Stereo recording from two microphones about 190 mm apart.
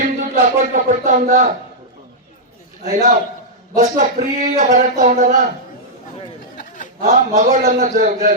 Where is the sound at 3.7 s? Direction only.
40° right (ahead or behind).